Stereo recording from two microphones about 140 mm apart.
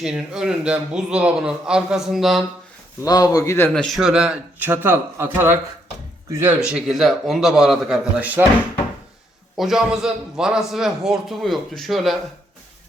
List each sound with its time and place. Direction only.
0.0 s a man's voice: 5° right (ahead or behind)
3.0 s speech: 25° left (ahead or behind)
3.7 s a man's voice: centre (ahead or behind); by 5.5 s 15° right (ahead or behind)
6.7 s a man's voice: 5° right (ahead or behind)
9.6 s a man's voice: centre (ahead or behind)